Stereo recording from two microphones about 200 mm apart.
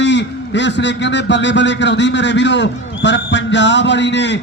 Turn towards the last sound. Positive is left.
turn(degrees=60)  # may be behind; listen again after turning